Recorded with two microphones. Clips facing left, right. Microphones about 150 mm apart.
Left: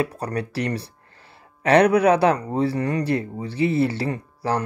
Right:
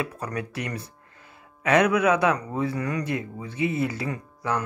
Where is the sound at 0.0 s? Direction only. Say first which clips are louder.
Left 5 dB; 35° left (ahead or behind).